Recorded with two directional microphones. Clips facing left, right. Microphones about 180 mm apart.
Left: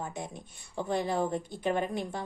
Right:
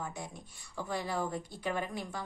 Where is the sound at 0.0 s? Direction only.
20° left (ahead or behind).